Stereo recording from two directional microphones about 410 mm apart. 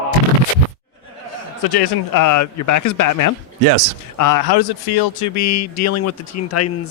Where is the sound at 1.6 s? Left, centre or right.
Left.